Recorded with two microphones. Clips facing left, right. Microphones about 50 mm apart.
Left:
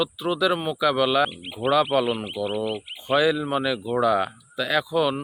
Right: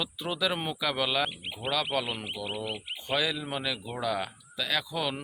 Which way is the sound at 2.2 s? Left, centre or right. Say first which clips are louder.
Left 8 dB; centre.